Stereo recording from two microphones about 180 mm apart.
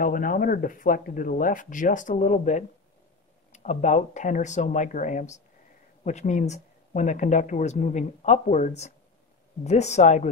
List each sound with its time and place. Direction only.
0.0 s speech: 50° left (ahead or behind)